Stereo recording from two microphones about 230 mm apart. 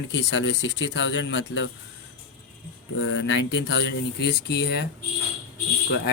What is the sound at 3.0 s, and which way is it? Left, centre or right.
Speech, left.